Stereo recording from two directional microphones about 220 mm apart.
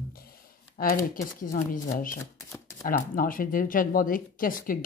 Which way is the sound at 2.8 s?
40° left (ahead or behind).